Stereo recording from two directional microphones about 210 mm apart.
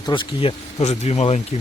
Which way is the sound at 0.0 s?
20° left (ahead or behind).